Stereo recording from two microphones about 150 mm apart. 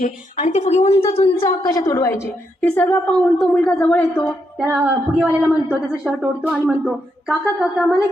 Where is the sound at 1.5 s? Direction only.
25° left (ahead or behind); by 4.3 s 10° left (ahead or behind).